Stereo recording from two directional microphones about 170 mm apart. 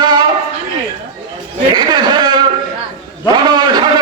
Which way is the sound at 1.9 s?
25° right (ahead or behind).